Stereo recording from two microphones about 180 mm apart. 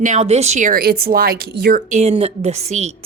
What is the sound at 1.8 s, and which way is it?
Speech, 40° right (ahead or behind).